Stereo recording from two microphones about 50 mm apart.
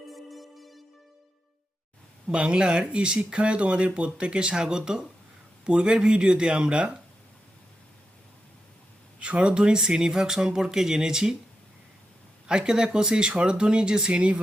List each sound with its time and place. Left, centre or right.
0.1 s music: centre
2.3 s speech: right
9.2 s speech: right
12.5 s speech: centre